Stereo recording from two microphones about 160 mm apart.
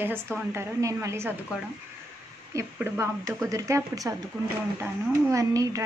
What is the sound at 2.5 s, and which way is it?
A woman's voice, 15° right (ahead or behind).